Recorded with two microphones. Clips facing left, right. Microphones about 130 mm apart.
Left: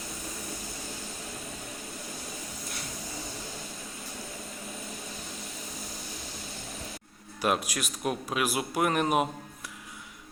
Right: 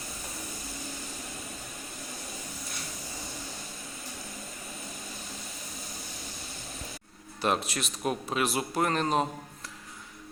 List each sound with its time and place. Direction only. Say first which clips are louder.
7.4 s a man's voice: left 1 dB; 5° left (ahead or behind)